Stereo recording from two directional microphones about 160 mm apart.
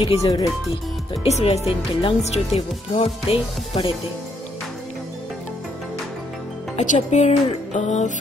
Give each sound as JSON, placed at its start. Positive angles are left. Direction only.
{"t": 0.2, "sound": "speech", "side_deg": 20}
{"t": 1.2, "sound": "speech", "side_deg": 40}
{"t": 6.8, "sound": "speech", "side_deg": 45}